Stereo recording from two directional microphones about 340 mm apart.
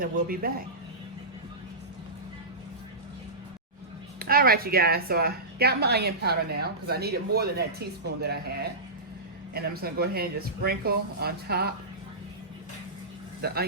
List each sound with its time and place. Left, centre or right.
0.0 s a woman's voice: right
4.2 s a woman's voice: right
13.4 s a woman's voice: right